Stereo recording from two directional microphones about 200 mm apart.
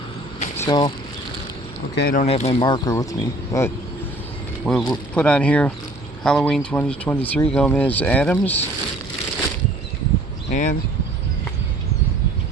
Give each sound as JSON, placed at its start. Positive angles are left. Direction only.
{"t": 0.5, "sound": "speech", "side_deg": 15}
{"t": 2.0, "sound": "speech", "side_deg": 50}
{"t": 2.2, "sound": "speech", "side_deg": 30}
{"t": 4.6, "sound": "speech", "side_deg": 0}